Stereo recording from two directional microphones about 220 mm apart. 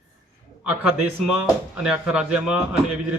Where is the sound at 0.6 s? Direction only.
5° right (ahead or behind).